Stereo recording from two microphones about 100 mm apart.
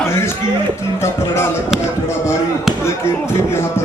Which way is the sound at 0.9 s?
30° left (ahead or behind).